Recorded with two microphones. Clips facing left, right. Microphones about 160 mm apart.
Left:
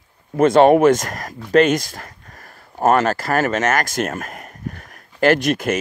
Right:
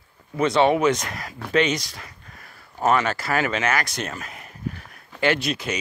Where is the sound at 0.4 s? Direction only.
50° left (ahead or behind).